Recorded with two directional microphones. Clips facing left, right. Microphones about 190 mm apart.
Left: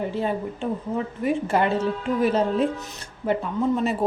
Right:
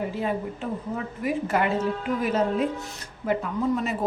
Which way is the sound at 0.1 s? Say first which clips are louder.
Left 2 dB; 30° left (ahead or behind).